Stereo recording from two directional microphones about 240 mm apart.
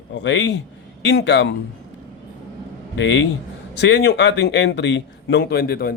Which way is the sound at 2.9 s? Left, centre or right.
Left.